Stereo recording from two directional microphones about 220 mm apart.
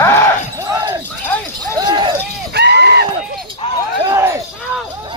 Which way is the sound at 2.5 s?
50° right (ahead or behind).